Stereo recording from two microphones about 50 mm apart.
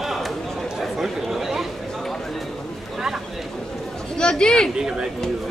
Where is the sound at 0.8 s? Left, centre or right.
Centre.